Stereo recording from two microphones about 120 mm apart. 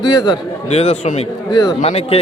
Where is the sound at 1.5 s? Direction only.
35° left (ahead or behind).